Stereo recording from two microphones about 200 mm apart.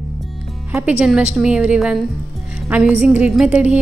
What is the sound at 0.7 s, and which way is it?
A woman's voice, 5° right (ahead or behind).